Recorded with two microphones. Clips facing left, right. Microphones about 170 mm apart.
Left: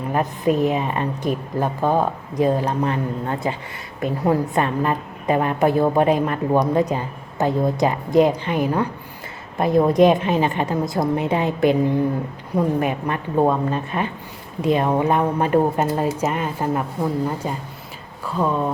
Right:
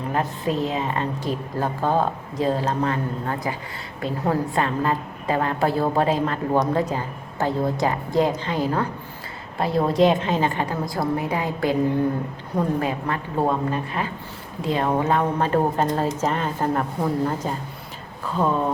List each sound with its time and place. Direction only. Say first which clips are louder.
0.1 s a woman's voice: left 5 dB; 15° left (ahead or behind); by 18.6 s centre (ahead or behind)